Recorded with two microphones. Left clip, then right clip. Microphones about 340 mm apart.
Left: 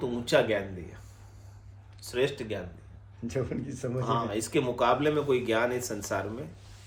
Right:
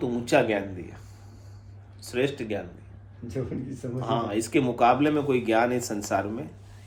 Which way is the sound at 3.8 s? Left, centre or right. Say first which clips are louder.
Left 3 dB; left.